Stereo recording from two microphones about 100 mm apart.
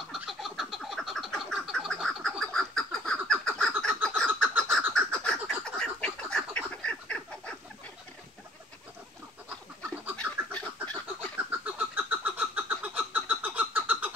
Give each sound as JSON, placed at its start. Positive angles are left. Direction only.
{"t": 0.1, "sound": "frog", "side_deg": -5}
{"t": 3.8, "sound": "fowl", "side_deg": 5}
{"t": 4.4, "sound": "frog", "side_deg": 5}
{"t": 10.1, "sound": "chicken", "side_deg": 10}
{"t": 11.6, "sound": "a sound", "side_deg": -15}